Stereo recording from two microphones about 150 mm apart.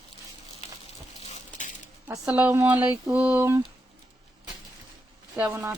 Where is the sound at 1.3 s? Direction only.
55° left (ahead or behind).